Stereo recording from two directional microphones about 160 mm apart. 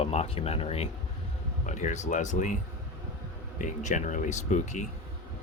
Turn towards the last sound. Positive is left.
turn(degrees=45)  # may be behind; listen again after turning